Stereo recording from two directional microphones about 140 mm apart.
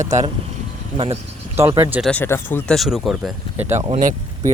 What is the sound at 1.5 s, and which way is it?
Speech, 20° right (ahead or behind).